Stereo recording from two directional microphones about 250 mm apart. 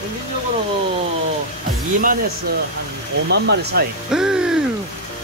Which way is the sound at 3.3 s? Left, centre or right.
Right.